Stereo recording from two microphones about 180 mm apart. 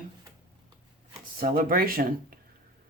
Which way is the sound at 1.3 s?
50° right (ahead or behind).